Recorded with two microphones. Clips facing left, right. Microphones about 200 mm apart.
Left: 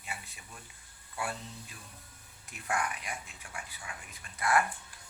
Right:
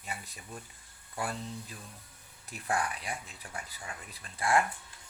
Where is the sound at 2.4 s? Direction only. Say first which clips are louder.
Right 2 dB; 35° right (ahead or behind).